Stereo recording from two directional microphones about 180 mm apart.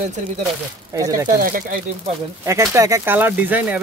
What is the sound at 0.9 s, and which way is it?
Speech, 20° right (ahead or behind).